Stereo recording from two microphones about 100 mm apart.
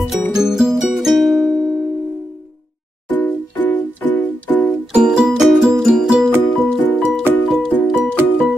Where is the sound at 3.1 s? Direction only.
15° left (ahead or behind).